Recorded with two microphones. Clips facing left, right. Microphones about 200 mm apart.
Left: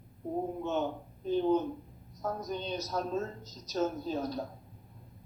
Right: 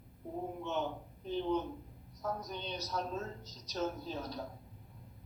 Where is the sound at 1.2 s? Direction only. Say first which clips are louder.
Left 6 dB; 45° left (ahead or behind).